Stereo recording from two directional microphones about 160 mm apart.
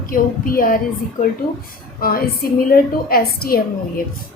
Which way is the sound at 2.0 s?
65° left (ahead or behind).